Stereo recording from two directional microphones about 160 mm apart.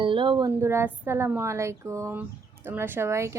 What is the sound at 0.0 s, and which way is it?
Music, 30° right (ahead or behind).